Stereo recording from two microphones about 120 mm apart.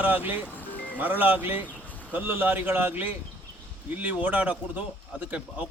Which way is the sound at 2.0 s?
15° right (ahead or behind).